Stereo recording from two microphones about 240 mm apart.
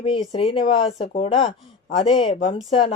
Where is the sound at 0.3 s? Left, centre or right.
Left.